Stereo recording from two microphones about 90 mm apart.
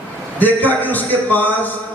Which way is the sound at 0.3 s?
20° left (ahead or behind).